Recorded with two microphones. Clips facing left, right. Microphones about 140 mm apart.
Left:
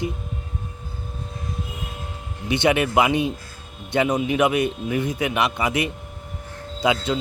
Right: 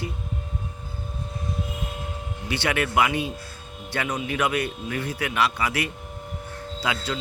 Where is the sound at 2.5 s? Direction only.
20° left (ahead or behind).